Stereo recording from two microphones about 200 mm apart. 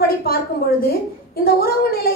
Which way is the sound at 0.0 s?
50° left (ahead or behind).